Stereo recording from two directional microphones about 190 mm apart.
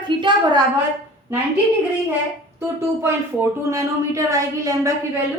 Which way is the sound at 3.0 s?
15° right (ahead or behind).